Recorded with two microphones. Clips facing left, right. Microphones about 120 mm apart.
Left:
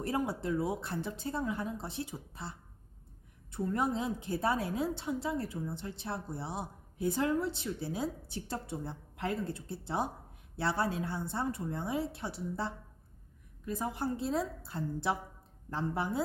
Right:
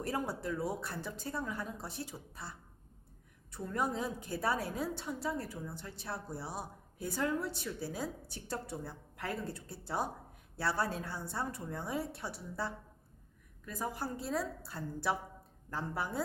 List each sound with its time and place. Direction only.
0.0 s a woman's voice: 20° left (ahead or behind)
3.7 s a woman's voice: 20° left (ahead or behind)